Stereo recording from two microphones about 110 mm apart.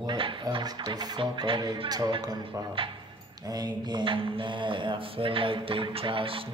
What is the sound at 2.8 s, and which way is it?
Speech, 55° right (ahead or behind).